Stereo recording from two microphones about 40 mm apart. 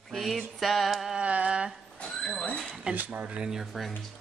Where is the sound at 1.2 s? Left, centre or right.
Right.